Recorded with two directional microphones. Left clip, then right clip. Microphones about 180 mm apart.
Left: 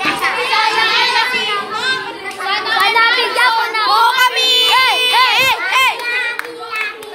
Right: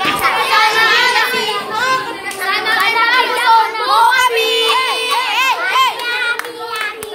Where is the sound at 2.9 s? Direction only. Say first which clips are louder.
Left 1 dB; 45° left (ahead or behind).